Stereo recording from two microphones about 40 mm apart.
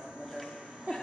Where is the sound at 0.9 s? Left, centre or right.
Right.